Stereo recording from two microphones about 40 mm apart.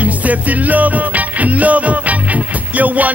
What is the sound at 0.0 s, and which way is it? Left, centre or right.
Music, right.